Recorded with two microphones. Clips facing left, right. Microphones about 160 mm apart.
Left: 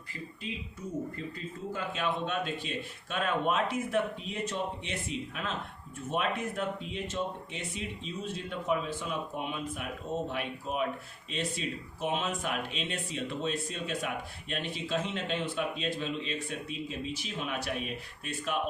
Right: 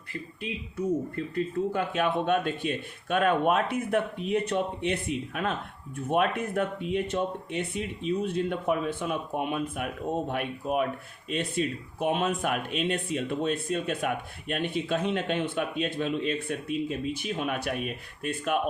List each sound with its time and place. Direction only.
0.8 s speech: 65° right (ahead or behind)